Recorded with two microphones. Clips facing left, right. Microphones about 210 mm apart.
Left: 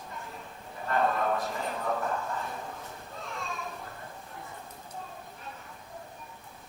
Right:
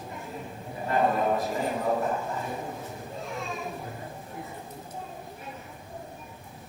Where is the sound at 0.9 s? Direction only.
15° right (ahead or behind).